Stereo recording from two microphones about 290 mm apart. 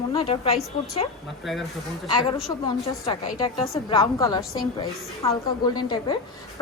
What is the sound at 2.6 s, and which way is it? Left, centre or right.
A woman's voice, centre.